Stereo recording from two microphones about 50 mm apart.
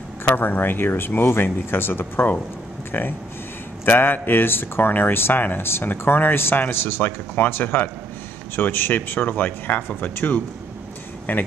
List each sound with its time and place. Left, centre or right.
0.2 s speech: left